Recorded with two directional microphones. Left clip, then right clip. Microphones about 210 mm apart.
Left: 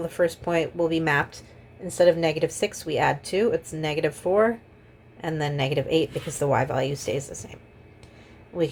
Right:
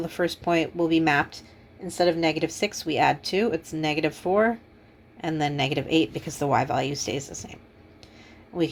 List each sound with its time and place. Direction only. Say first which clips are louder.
0.0 s speech: left 2 dB; 25° right (ahead or behind)